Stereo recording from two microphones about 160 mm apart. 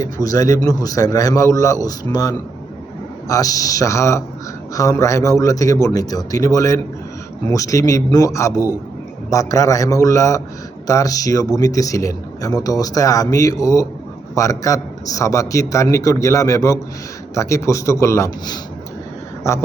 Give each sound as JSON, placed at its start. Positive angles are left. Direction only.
{"t": 0.0, "sound": "speech", "side_deg": 20}